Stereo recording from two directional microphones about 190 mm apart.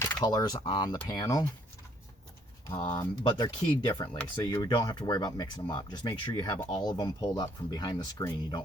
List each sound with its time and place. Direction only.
0.0 s speech: 15° left (ahead or behind)
2.9 s speech: 15° left (ahead or behind)